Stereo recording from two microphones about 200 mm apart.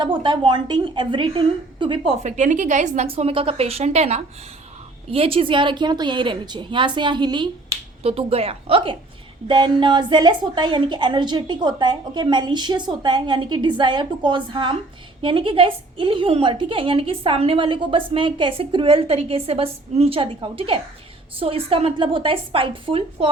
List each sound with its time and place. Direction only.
0.0 s a woman's voice: 25° right (ahead or behind)